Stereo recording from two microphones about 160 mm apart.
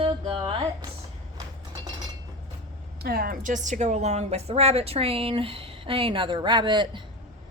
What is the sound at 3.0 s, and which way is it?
A woman's voice, 70° right (ahead or behind).